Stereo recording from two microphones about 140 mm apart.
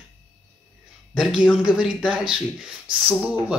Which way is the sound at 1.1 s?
5° right (ahead or behind).